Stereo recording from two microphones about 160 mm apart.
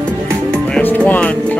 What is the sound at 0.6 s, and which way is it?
Music, 10° left (ahead or behind).